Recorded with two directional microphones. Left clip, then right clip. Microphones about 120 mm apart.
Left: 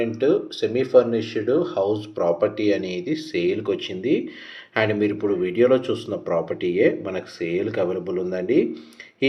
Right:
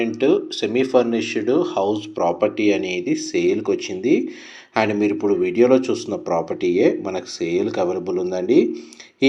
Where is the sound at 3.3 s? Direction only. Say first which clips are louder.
Right 3 dB; 40° right (ahead or behind).